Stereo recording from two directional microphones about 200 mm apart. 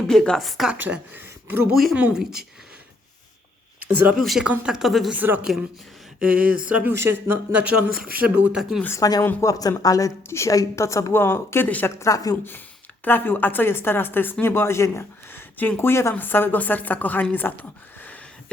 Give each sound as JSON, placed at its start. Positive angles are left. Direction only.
{"t": 0.1, "sound": "a woman's voice", "side_deg": 5}
{"t": 3.9, "sound": "a woman's voice", "side_deg": -10}
{"t": 7.9, "sound": "speech", "side_deg": -50}
{"t": 8.4, "sound": "a woman's voice", "side_deg": -5}
{"t": 8.8, "sound": "a woman's voice", "side_deg": 15}